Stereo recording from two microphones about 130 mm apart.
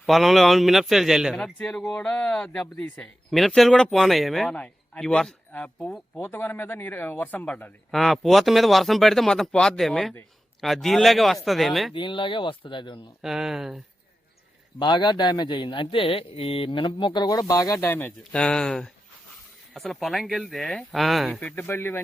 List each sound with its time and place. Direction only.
0.0 s a man's voice: centre (ahead or behind)
1.5 s a man's voice: 5° left (ahead or behind)
11.9 s speech: 40° left (ahead or behind)
13.2 s a man's voice: 5° right (ahead or behind)
14.8 s speech: 35° left (ahead or behind); by 18.1 s 20° left (ahead or behind)
18.3 s a man's voice: 5° left (ahead or behind)
21.4 s speech: 15° left (ahead or behind)